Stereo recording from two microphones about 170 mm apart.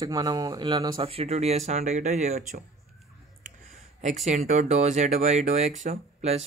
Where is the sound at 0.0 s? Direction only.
25° right (ahead or behind); by 2.4 s 40° right (ahead or behind).